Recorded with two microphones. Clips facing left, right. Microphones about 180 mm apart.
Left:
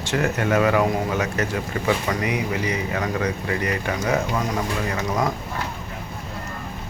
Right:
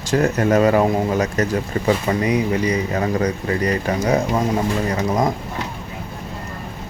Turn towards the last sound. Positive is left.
turn(degrees=-35)  # may be behind; listen again after turning